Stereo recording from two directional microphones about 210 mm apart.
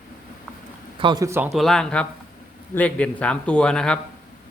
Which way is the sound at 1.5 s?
Centre (ahead or behind).